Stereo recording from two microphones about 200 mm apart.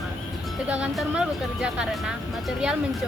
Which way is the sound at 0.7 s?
5° right (ahead or behind).